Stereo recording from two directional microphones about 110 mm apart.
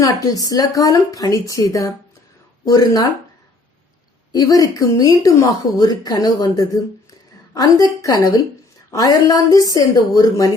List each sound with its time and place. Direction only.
0.0 s speech: 30° left (ahead or behind)
4.3 s speech: 30° left (ahead or behind)
8.0 s speech: 30° left (ahead or behind)